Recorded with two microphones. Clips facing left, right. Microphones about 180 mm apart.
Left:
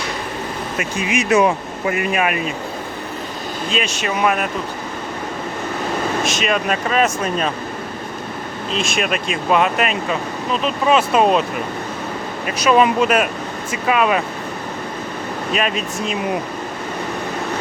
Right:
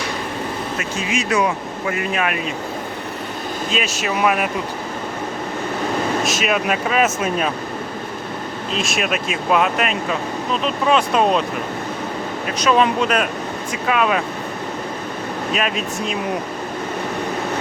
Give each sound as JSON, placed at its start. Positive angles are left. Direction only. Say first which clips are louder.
{"t": 0.8, "sound": "speech", "louder": "left 5 dB", "side_deg": 20}
{"t": 2.0, "sound": "speech", "louder": "left 3 dB", "side_deg": 10}
{"t": 3.7, "sound": "speech", "louder": "left 1 dB", "side_deg": 0}
{"t": 6.2, "sound": "speech", "louder": "even", "side_deg": -5}
{"t": 8.7, "sound": "speech", "louder": "left 1 dB", "side_deg": 0}
{"t": 12.5, "sound": "speech", "louder": "left 2 dB", "side_deg": 5}
{"t": 15.5, "sound": "speech", "louder": "left 2 dB", "side_deg": 0}